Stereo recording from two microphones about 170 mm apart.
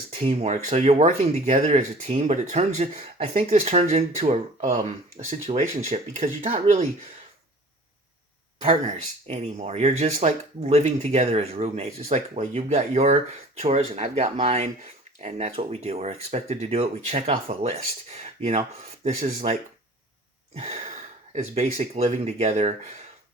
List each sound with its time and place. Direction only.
0.1 s speech: 40° right (ahead or behind)
8.6 s speech: 40° right (ahead or behind)
20.6 s gasp: 40° right (ahead or behind)
21.3 s speech: 40° right (ahead or behind)